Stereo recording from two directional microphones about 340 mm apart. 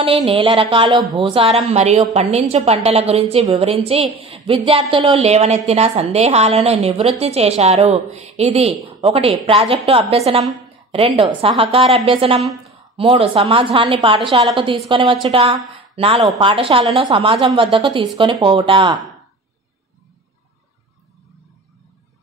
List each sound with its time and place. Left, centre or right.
0.0 s a woman's voice: centre